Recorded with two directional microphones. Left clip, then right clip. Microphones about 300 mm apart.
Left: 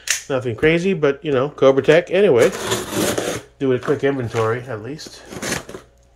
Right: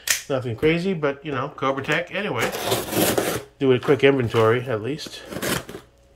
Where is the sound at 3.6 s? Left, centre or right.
Centre.